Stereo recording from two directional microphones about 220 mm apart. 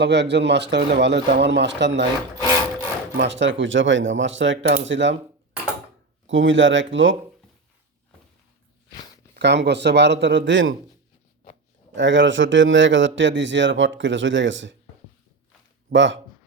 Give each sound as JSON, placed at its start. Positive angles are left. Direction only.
{"t": 0.0, "sound": "speech", "side_deg": -50}
{"t": 3.2, "sound": "a man's voice", "side_deg": -55}
{"t": 6.2, "sound": "a man's voice", "side_deg": -60}
{"t": 9.3, "sound": "speech", "side_deg": -50}
{"t": 11.9, "sound": "a man's voice", "side_deg": -55}
{"t": 15.9, "sound": "a man's voice", "side_deg": -55}